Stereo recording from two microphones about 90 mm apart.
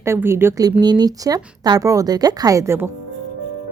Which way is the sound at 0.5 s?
45° right (ahead or behind).